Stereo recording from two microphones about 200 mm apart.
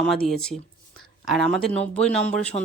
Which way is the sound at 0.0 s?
5° left (ahead or behind).